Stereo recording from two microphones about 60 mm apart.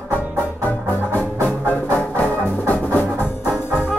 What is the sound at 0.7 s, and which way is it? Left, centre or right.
Music, left.